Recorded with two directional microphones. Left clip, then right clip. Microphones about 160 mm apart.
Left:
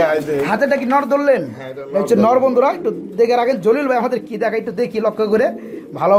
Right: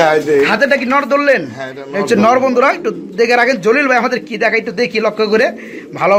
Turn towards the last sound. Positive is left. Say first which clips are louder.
# right 2 dB
turn(degrees=5)  # may be behind; listen again after turning